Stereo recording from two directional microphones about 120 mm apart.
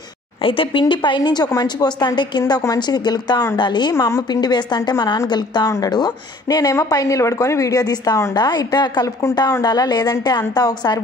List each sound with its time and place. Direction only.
0.4 s a woman's voice: 45° left (ahead or behind)